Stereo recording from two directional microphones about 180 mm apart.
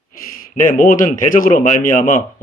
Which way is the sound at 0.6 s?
50° left (ahead or behind).